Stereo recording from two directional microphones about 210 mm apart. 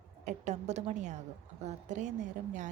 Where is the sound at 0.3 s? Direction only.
35° right (ahead or behind).